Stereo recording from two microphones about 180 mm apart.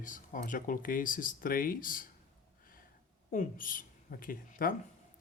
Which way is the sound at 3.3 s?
50° left (ahead or behind).